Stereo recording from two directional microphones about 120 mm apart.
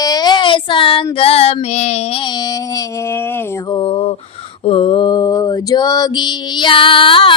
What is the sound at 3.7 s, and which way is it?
Speech, 45° left (ahead or behind).